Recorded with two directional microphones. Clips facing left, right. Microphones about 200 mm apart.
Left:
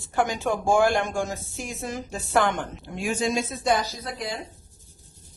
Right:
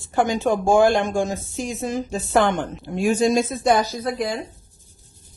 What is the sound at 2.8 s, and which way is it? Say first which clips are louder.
A man's voice: right 8 dB; 40° right (ahead or behind).